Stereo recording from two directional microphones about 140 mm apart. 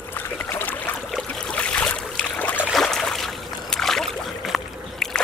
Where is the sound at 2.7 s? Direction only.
Centre (ahead or behind).